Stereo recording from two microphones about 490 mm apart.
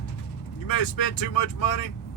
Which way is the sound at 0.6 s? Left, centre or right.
Left.